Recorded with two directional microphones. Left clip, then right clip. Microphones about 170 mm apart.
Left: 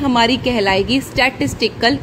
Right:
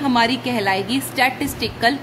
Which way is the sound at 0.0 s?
25° left (ahead or behind).